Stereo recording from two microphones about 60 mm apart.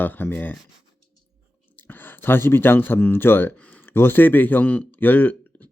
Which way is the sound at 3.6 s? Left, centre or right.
Left.